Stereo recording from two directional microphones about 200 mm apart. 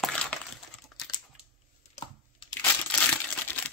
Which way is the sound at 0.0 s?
5° left (ahead or behind).